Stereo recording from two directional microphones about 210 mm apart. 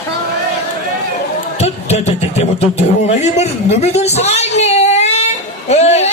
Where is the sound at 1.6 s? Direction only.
30° left (ahead or behind).